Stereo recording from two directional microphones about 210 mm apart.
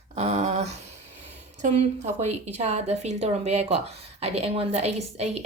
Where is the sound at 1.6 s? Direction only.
30° right (ahead or behind).